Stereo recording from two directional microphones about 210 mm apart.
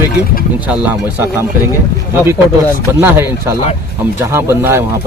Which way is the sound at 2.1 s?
10° right (ahead or behind).